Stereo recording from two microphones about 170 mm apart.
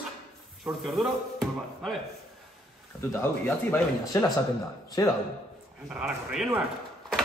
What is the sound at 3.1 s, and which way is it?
Speech, 15° left (ahead or behind).